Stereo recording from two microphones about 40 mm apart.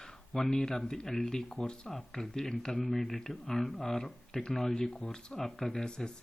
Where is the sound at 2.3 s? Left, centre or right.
Centre.